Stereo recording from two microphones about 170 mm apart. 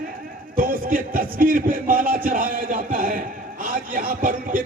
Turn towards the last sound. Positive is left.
turn(degrees=-55)  # may be behind; listen again after turning